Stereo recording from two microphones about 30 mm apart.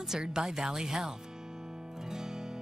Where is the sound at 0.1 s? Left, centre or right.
Right.